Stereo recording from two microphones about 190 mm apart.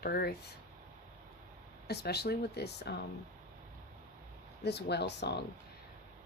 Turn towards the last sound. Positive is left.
turn(degrees=60)  # may be behind; listen again after turning